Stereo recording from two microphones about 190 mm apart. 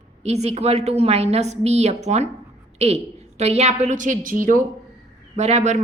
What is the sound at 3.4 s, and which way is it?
A woman's voice, 35° right (ahead or behind).